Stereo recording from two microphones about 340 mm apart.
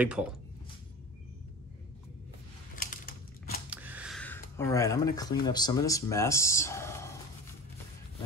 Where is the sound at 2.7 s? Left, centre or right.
Left.